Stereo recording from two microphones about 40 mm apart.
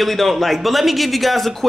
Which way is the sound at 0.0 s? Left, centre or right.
Centre.